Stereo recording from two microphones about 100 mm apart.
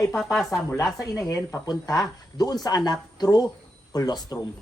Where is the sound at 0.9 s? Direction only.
35° left (ahead or behind).